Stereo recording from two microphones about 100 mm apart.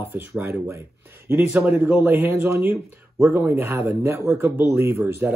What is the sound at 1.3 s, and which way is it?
Speech, 20° right (ahead or behind).